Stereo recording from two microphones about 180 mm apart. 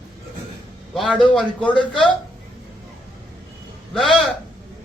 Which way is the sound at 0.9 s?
Centre (ahead or behind).